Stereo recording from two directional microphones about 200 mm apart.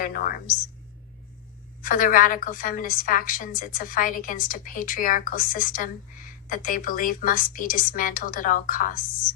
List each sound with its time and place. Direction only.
0.0 s a woman's voice: 45° left (ahead or behind)
1.8 s a woman's voice: 45° left (ahead or behind)